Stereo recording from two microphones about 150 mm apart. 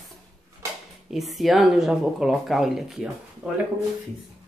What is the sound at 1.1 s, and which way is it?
Speech, centre (ahead or behind).